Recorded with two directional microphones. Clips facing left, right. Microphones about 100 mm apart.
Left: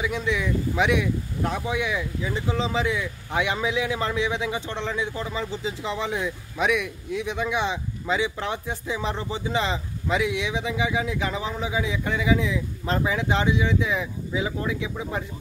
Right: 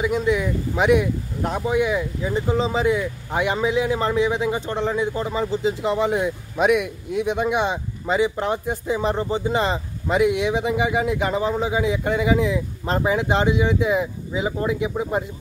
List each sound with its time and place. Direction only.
0.0 s speech: 45° right (ahead or behind)
12.8 s speech: 35° right (ahead or behind)